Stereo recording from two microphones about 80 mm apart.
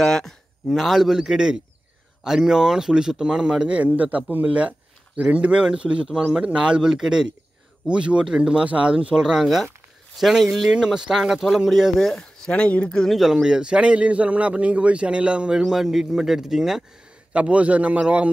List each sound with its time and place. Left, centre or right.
0.0 s speech: centre
12.2 s speech: centre
13.1 s speech: centre
17.3 s speech: centre